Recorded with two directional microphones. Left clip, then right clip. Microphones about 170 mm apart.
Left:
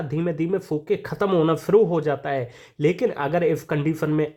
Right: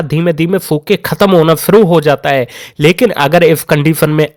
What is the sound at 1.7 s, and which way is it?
Speech, 45° right (ahead or behind).